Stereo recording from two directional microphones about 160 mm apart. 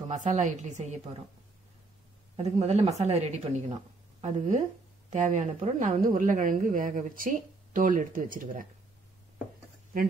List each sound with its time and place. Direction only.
0.1 s a woman's voice: 50° right (ahead or behind)
2.3 s a woman's voice: 40° right (ahead or behind); by 8.6 s 60° right (ahead or behind)